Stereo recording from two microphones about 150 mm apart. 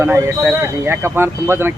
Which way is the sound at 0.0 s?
15° right (ahead or behind).